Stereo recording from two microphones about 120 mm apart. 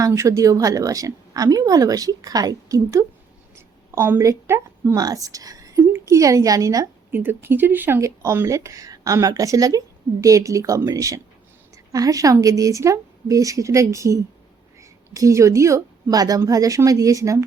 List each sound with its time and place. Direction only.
0.0 s a woman's voice: 25° right (ahead or behind)
7.1 s a woman's voice: 20° right (ahead or behind)